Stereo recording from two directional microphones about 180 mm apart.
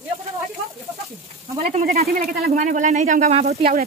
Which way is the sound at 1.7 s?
50° right (ahead or behind).